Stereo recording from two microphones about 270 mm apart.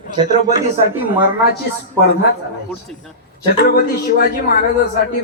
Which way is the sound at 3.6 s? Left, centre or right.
Left.